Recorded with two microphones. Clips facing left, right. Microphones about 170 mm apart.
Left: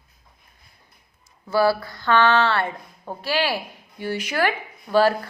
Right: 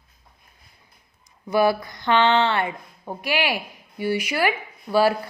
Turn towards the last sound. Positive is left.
turn(degrees=-10)  # may be behind; listen again after turning